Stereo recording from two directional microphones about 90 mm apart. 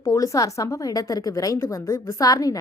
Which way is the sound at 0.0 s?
40° left (ahead or behind).